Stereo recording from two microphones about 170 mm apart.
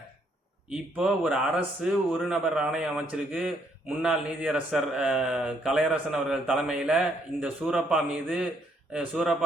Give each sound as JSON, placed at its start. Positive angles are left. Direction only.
{"t": 0.7, "sound": "a man's voice", "side_deg": -5}